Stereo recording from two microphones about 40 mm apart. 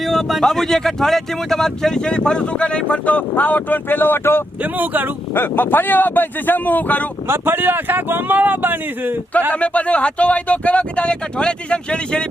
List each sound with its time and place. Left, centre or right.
0.0 s a sound: centre
0.4 s speech: centre; by 3.0 s left
3.1 s speech: left
4.6 s speech: right
5.3 s speech: left
7.3 s speech: right
9.5 s speech: left